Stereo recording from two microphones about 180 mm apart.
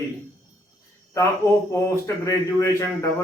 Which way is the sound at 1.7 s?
15° left (ahead or behind).